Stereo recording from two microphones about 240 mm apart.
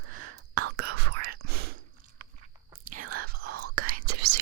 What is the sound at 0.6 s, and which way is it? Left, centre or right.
Whispering, right.